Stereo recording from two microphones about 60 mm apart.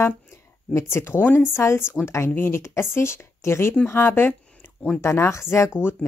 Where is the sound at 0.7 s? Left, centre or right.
Left.